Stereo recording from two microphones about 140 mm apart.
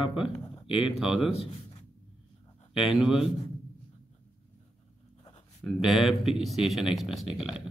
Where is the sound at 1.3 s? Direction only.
45° left (ahead or behind).